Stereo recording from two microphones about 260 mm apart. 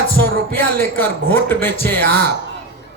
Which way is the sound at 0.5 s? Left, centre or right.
Centre.